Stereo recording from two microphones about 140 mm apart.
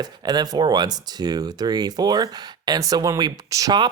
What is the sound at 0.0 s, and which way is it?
Speech, 30° right (ahead or behind).